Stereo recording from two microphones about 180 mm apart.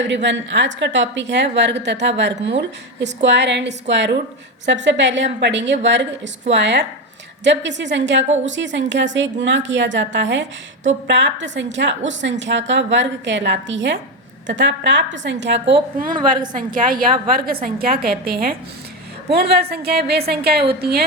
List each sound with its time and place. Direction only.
0.1 s a woman's voice: 80° right
16.0 s a woman's voice: 50° right (ahead or behind)
16.3 s a woman's voice: 25° right (ahead or behind)
16.6 s a woman's voice: 50° right (ahead or behind)